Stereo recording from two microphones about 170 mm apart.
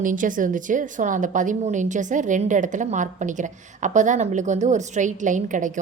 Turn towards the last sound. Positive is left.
turn(degrees=-50)  # may be behind; listen again after turning